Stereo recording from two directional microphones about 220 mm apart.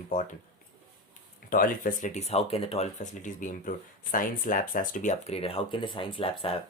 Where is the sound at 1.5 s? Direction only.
40° left (ahead or behind).